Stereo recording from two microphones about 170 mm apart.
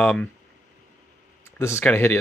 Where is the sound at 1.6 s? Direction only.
15° left (ahead or behind).